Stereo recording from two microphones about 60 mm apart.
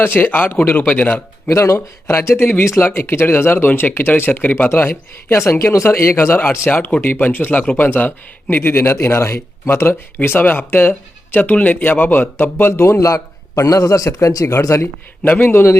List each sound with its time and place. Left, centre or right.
0.0 s speech: left
1.5 s a man's voice: left
14.6 s speech: left
15.2 s speech: left